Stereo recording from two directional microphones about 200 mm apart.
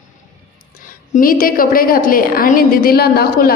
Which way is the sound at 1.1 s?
45° left (ahead or behind).